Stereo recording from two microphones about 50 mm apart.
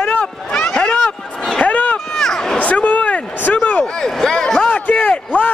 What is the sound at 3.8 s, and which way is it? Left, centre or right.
Speech, centre.